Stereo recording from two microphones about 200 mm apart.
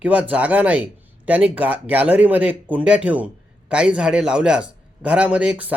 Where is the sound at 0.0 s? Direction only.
5° right (ahead or behind).